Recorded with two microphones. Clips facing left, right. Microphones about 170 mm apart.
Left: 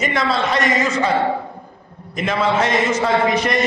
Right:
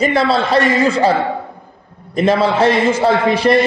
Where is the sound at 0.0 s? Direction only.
30° right (ahead or behind).